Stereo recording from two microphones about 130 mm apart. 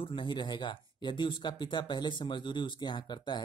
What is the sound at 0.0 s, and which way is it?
Speech, 40° left (ahead or behind).